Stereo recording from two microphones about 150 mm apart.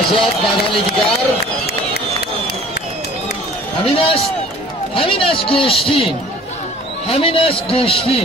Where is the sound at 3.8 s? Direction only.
40° left (ahead or behind).